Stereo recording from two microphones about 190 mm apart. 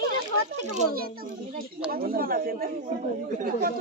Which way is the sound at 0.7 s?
50° right (ahead or behind).